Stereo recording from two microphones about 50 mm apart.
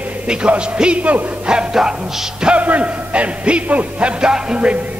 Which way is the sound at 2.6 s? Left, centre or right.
Right.